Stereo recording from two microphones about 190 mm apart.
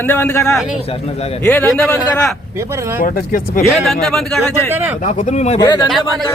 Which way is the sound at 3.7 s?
Centre (ahead or behind).